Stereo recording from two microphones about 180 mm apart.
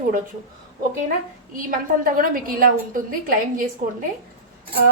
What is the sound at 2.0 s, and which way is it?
Speech, 50° right (ahead or behind).